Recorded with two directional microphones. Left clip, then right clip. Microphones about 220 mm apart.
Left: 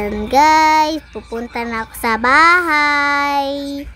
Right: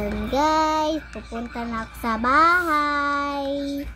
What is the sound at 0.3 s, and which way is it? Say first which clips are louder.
A child's voice: left 10 dB; 30° left (ahead or behind).